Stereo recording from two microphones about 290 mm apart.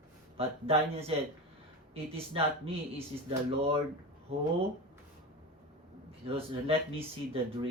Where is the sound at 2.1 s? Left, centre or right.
Centre.